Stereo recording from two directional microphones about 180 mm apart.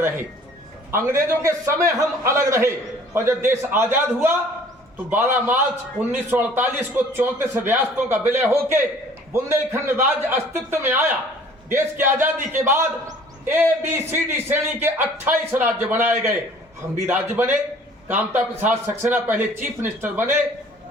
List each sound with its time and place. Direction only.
0.9 s a man's voice: 15° right (ahead or behind)